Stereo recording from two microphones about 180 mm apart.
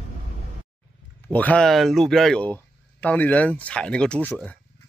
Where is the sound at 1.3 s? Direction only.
5° left (ahead or behind).